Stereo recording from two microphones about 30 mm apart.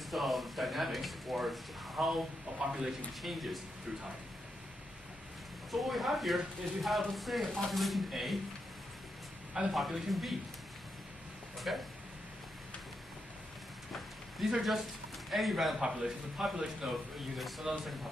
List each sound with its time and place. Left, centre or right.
0.1 s speech: centre
2.6 s speech: right
3.2 s speech: centre
5.7 s speech: centre
9.7 s speech: centre
11.5 s a sound: centre
14.6 s speech: centre
15.8 s speech: centre
16.8 s speech: right
17.4 s speech: centre